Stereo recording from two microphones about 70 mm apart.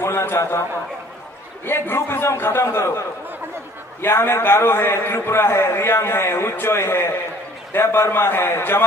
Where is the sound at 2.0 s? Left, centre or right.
Left.